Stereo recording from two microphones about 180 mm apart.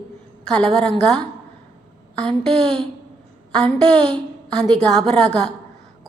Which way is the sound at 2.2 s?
5° left (ahead or behind).